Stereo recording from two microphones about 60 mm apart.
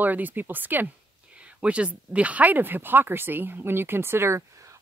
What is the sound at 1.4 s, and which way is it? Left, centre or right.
Speech, centre.